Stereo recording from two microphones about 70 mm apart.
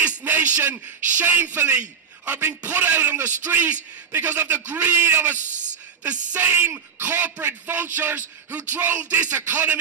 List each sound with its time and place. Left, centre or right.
0.0 s a man's voice: right